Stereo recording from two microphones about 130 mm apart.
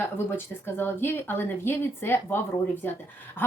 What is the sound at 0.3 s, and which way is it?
Speech, 15° left (ahead or behind).